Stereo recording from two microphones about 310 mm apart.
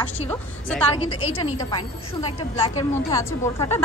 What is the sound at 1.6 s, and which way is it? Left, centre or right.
Speech, centre.